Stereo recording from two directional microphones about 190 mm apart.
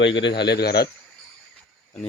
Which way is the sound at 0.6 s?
55° left (ahead or behind).